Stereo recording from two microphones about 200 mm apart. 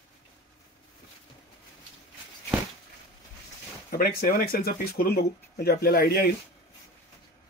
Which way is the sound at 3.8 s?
45° left (ahead or behind).